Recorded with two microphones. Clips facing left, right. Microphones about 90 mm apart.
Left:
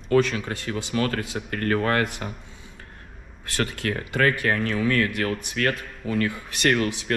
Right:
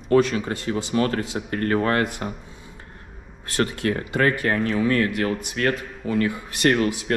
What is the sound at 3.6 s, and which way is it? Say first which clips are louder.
Speech: right 4 dB; 35° right (ahead or behind).